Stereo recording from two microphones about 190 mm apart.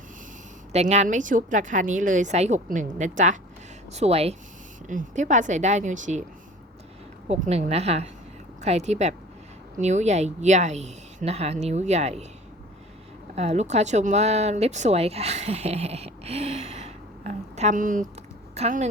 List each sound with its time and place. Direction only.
0.7 s speech: 35° right (ahead or behind)
7.3 s speech: 35° right (ahead or behind)
13.3 s speech: 35° right (ahead or behind)